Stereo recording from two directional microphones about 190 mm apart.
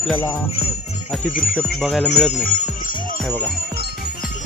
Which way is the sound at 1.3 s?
45° left (ahead or behind).